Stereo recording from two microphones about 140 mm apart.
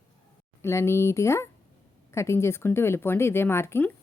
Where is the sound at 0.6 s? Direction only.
20° left (ahead or behind).